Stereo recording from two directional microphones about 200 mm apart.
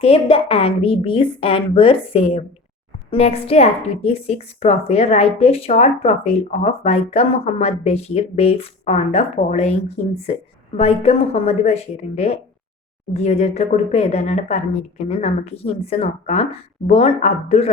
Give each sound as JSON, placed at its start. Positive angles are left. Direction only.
{"t": 0.0, "sound": "a woman's voice", "side_deg": 30}